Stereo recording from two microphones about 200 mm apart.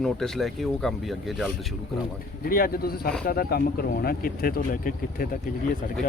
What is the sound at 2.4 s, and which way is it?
Speech, 45° left (ahead or behind).